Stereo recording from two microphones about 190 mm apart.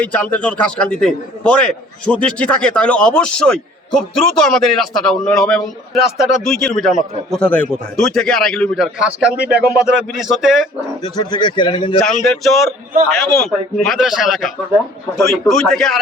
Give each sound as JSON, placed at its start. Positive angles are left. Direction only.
{"t": 0.0, "sound": "a man's voice", "side_deg": 5}
{"t": 11.2, "sound": "speech", "side_deg": 25}
{"t": 12.0, "sound": "a man's voice", "side_deg": 0}